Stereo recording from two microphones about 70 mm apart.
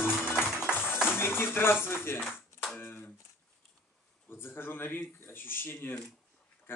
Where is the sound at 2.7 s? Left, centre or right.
Left.